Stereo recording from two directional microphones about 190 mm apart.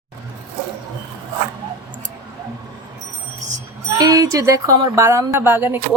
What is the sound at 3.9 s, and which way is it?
Speech, 20° right (ahead or behind).